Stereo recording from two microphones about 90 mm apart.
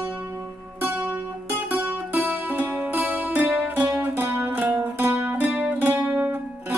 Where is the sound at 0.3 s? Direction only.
25° right (ahead or behind).